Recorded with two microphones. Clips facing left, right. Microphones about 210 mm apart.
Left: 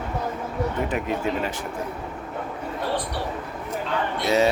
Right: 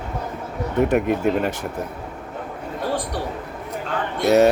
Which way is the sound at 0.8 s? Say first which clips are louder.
Right 6 dB; 60° right (ahead or behind).